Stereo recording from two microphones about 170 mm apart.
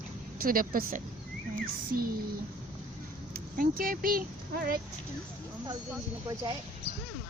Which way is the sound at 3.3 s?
60° right (ahead or behind).